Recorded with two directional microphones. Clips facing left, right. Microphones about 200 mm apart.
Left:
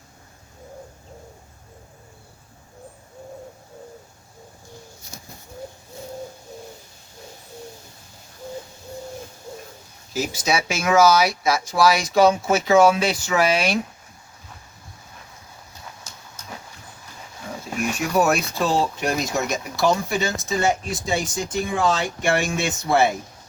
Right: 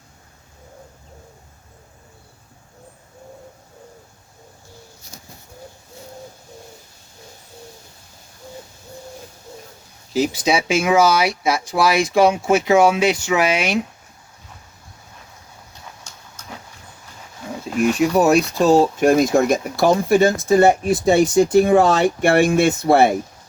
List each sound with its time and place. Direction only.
10.1 s speech: 30° right (ahead or behind)
18.2 s speech: 35° right (ahead or behind); by 23.1 s 55° right (ahead or behind)